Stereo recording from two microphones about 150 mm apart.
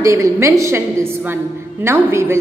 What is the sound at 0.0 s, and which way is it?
A woman's voice, 20° right (ahead or behind).